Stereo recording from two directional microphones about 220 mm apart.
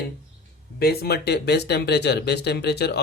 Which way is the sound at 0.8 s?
45° left (ahead or behind).